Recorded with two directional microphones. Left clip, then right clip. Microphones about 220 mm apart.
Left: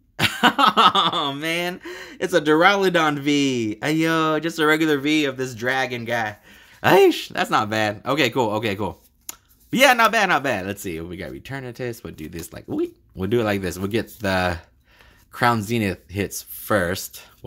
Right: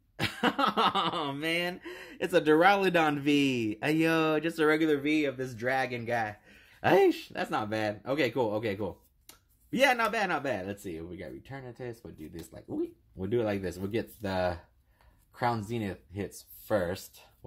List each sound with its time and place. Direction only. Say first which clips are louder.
0.2 s speech: left 12 dB; 25° left (ahead or behind)
6.8 s speech: left 9 dB; 25° left (ahead or behind)